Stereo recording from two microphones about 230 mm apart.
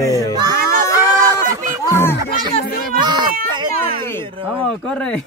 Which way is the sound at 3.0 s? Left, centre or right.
Centre.